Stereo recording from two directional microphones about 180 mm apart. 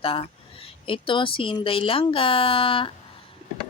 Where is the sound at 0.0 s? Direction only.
30° left (ahead or behind).